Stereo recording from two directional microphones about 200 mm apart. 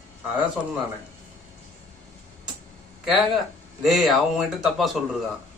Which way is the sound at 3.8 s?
Centre (ahead or behind).